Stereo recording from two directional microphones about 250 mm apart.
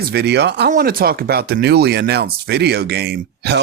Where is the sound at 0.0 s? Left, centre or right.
Right.